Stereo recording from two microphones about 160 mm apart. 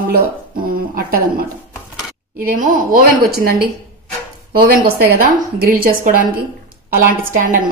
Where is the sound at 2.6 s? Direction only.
65° right (ahead or behind).